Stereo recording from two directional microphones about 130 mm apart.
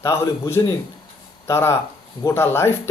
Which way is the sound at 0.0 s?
20° left (ahead or behind).